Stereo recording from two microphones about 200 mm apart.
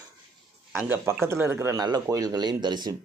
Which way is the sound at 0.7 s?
10° right (ahead or behind).